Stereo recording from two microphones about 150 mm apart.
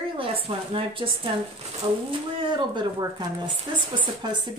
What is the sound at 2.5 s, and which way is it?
A woman's voice, 30° right (ahead or behind).